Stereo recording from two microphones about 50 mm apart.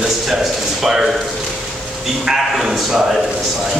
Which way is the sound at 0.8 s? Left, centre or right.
Centre.